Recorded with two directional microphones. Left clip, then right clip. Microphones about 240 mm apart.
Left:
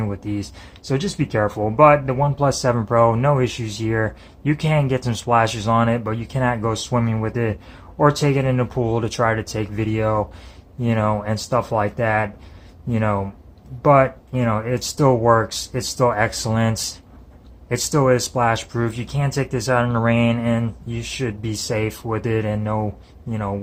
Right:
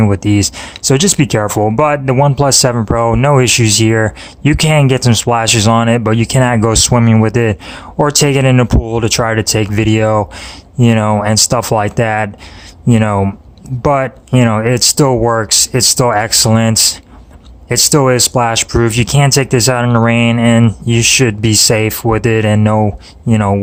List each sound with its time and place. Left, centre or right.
0.0 s speech: right